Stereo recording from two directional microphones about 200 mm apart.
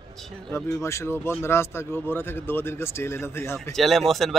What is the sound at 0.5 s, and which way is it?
A man's voice, 15° left (ahead or behind).